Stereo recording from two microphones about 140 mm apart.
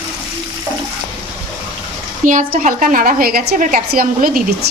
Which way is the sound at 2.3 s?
65° right (ahead or behind).